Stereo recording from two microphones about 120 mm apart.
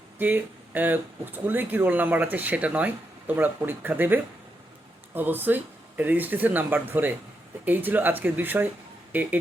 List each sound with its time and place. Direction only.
0.2 s speech: 15° right (ahead or behind)